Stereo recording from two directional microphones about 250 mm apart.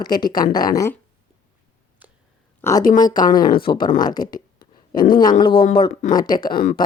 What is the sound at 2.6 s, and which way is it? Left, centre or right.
Speech, centre.